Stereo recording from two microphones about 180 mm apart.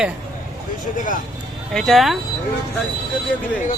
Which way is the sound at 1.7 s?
Centre (ahead or behind).